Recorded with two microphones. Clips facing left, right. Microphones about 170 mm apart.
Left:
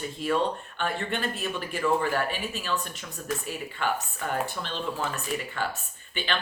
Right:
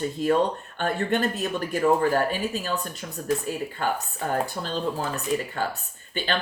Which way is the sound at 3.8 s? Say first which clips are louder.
Right 1 dB; 40° right (ahead or behind).